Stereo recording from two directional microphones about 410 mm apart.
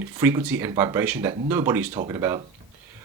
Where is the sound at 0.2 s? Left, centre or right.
Centre.